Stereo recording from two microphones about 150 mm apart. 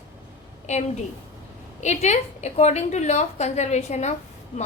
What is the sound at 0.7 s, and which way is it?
A woman's voice, 50° left (ahead or behind).